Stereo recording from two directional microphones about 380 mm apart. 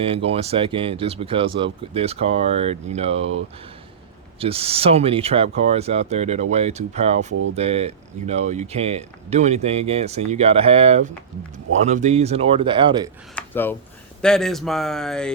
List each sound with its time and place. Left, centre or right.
0.0 s speech: centre
4.4 s speech: centre
13.3 s speech: centre